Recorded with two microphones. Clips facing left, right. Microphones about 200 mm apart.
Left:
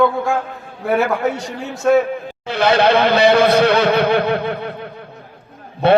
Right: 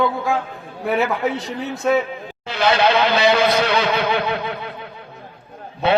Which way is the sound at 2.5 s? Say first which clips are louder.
Left 3 dB; 60° left (ahead or behind).